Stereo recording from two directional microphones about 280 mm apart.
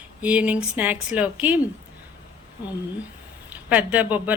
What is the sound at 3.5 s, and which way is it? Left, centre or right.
Speech, centre.